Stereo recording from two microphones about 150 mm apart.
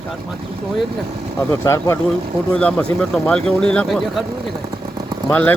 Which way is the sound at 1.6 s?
20° left (ahead or behind).